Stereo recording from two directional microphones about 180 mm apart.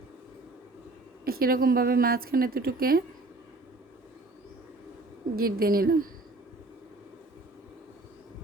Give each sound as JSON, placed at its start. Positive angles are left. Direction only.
{"t": 1.2, "sound": "a woman's voice", "side_deg": -55}
{"t": 5.4, "sound": "a woman's voice", "side_deg": -55}